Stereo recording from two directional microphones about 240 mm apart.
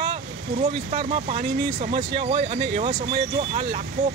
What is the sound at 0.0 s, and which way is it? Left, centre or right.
Speech, right.